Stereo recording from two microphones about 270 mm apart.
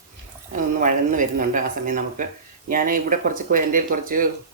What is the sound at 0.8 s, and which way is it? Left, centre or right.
Speech, right.